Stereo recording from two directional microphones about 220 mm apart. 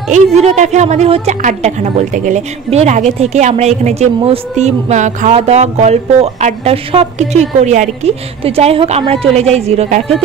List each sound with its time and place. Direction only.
0.1 s a woman's voice: 30° right (ahead or behind)